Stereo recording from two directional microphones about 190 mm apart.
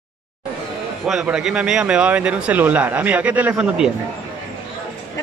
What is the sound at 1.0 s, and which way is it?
Speech, 5° right (ahead or behind).